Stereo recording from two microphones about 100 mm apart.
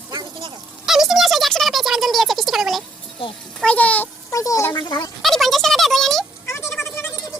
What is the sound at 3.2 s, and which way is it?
Speech, 65° left (ahead or behind).